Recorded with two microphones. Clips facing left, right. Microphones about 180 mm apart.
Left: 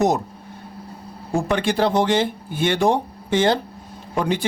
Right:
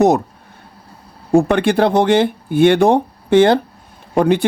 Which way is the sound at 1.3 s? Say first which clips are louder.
Right 8 dB; 60° right (ahead or behind).